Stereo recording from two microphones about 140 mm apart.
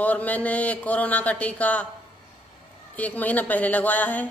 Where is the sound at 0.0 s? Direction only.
10° left (ahead or behind).